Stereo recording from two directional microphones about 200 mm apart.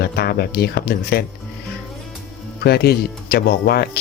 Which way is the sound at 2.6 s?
50° left (ahead or behind).